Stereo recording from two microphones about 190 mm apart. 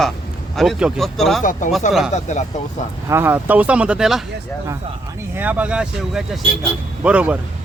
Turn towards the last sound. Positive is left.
turn(degrees=-5)  # may be behind; listen again after turning